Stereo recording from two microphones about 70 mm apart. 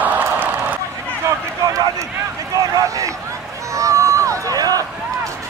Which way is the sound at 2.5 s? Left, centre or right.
Right.